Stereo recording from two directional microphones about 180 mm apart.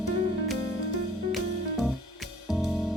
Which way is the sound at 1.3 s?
Centre (ahead or behind).